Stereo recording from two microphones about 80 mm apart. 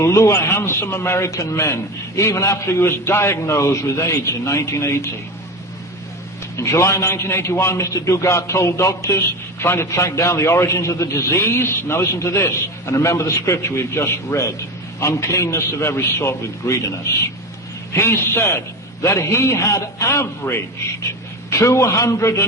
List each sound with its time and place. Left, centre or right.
0.0 s a man's voice: left
6.6 s a man's voice: left
17.9 s a man's voice: left
21.6 s a man's voice: left